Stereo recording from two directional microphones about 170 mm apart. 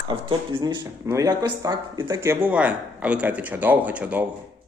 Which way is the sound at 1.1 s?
20° right (ahead or behind).